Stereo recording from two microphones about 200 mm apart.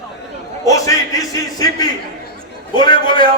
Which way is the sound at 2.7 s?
20° left (ahead or behind).